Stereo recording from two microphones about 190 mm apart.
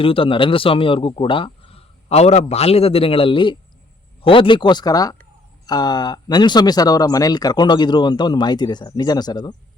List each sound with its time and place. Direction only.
0.0 s speech: 30° left (ahead or behind)